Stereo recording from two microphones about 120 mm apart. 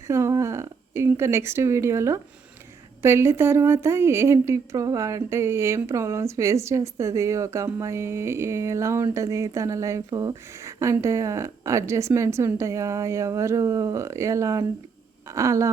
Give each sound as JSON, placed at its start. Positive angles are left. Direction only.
{"t": 0.1, "sound": "a woman's voice", "side_deg": -25}